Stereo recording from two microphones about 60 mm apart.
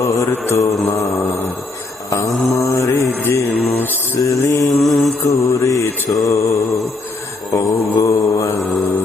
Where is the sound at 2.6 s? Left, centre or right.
Left.